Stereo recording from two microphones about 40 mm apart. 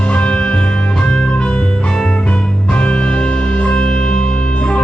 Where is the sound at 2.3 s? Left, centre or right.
Left.